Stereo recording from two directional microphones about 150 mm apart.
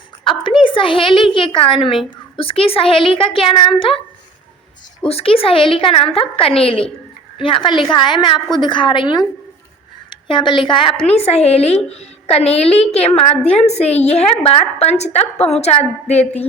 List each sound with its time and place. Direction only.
0.3 s a woman's voice: 35° left (ahead or behind)
5.0 s a woman's voice: 40° left (ahead or behind)